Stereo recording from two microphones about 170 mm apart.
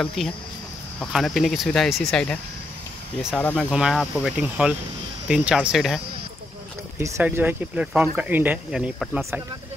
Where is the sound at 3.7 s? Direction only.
5° right (ahead or behind).